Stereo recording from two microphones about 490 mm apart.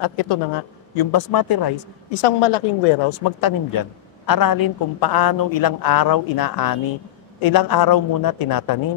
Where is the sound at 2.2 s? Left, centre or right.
Left.